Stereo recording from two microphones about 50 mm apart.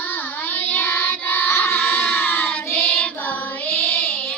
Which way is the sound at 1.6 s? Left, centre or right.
Left.